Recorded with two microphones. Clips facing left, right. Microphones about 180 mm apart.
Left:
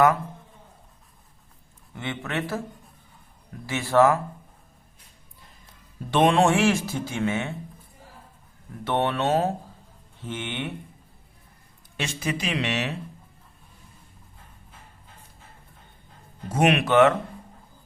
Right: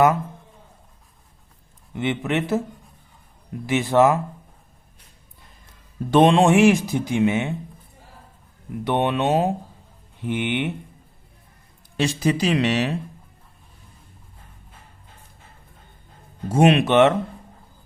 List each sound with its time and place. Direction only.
2.0 s speech: 20° right (ahead or behind)
6.2 s speech: 20° right (ahead or behind)
8.8 s speech: 15° right (ahead or behind)
11.9 s speech: 35° right (ahead or behind)
16.5 s speech: 30° right (ahead or behind)